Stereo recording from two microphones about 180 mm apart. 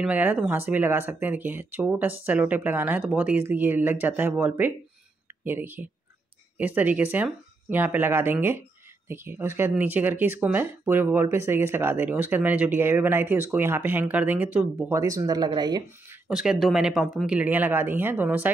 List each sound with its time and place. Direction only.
0.0 s speech: 10° right (ahead or behind)
15.0 s speech: 20° right (ahead or behind)
16.3 s speech: 5° right (ahead or behind)